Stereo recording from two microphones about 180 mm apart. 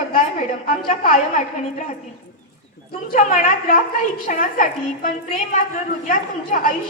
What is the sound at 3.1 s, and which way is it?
A woman's voice, 45° left (ahead or behind).